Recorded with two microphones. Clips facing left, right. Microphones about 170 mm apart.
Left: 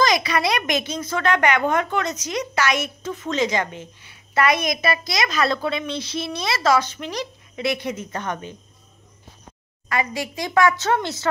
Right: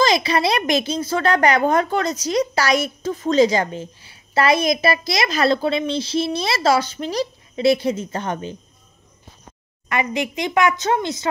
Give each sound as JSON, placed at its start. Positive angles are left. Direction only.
{"t": 0.0, "sound": "speech", "side_deg": -30}
{"t": 9.8, "sound": "a woman's voice", "side_deg": -20}